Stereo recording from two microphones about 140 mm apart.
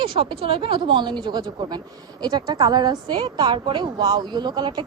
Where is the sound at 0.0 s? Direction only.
35° right (ahead or behind).